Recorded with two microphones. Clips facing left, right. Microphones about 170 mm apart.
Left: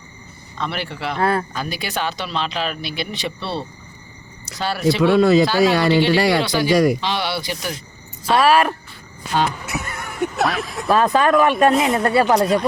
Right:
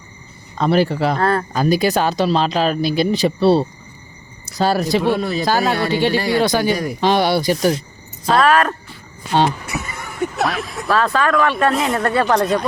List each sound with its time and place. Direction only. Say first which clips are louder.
0.6 s speech: right 10 dB; 40° right (ahead or behind)
1.2 s speech: left 3 dB; 10° left (ahead or behind)
1.5 s speech: right 10 dB; 40° right (ahead or behind)
4.9 s speech: left 5 dB; 90° left
6.4 s speech: left 1 dB; 45° right (ahead or behind)
8.4 s speech: even; 10° left (ahead or behind)
9.6 s a sound: even; centre (ahead or behind)
10.8 s speech: left 2 dB; 20° left (ahead or behind)
11.7 s speech: left 2 dB; centre (ahead or behind)
12.0 s speech: right 1 dB; 10° left (ahead or behind)